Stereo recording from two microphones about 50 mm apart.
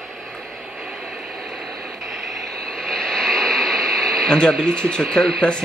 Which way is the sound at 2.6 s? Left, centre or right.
Centre.